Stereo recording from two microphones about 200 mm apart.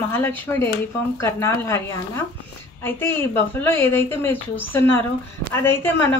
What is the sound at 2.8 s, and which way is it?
A woman's voice, 10° left (ahead or behind).